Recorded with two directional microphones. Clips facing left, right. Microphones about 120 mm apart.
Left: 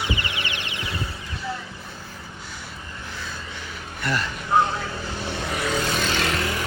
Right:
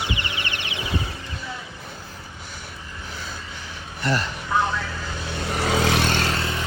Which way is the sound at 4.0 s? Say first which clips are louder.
Right 2 dB; 30° right (ahead or behind).